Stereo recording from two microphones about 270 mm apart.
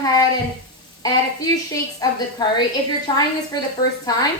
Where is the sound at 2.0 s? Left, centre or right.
Centre.